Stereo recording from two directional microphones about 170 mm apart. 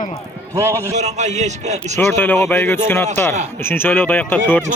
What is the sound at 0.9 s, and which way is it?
A man's voice, 40° right (ahead or behind).